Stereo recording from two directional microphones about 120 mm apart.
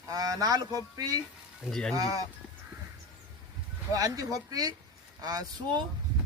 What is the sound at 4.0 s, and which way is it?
Speech, 30° right (ahead or behind).